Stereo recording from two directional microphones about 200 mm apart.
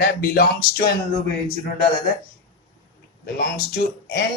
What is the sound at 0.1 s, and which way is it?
Speech, 50° left (ahead or behind).